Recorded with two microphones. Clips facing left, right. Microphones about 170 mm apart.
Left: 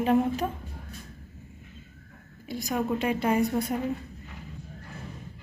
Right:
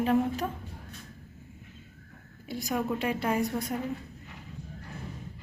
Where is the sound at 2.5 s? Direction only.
10° left (ahead or behind).